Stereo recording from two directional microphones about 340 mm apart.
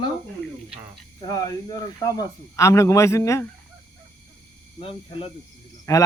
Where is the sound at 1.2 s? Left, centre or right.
Centre.